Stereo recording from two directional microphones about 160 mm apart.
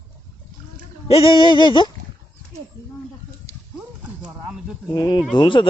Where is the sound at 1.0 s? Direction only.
35° left (ahead or behind).